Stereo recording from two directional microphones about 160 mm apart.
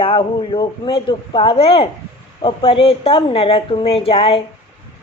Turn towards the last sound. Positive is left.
turn(degrees=35)  # may be behind; listen again after turning